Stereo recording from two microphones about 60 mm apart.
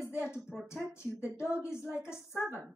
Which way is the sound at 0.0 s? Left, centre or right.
Left.